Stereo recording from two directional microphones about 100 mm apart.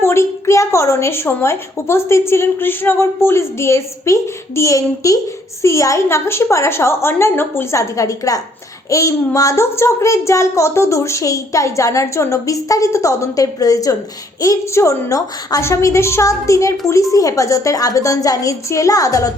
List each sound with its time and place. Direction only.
0.0 s a woman's voice: 25° left (ahead or behind)